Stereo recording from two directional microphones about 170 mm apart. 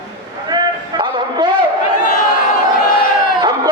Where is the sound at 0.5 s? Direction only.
25° right (ahead or behind).